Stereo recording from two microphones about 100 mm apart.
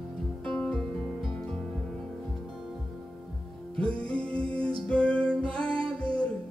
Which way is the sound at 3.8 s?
10° left (ahead or behind).